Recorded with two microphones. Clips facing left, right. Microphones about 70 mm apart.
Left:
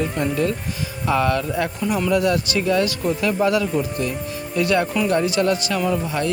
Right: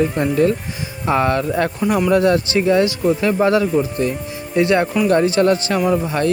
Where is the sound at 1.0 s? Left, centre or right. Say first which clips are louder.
Right 3 dB; right.